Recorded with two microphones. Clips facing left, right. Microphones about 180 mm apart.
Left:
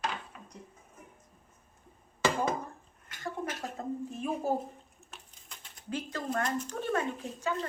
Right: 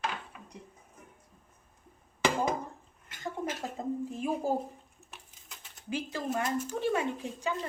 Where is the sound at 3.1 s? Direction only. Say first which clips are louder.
Right 1 dB; 25° right (ahead or behind).